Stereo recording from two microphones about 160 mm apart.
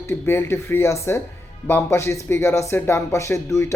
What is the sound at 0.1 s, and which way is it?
Speech, 15° left (ahead or behind).